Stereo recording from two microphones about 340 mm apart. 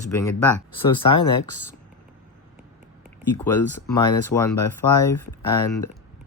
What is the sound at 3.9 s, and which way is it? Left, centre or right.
Speech, centre.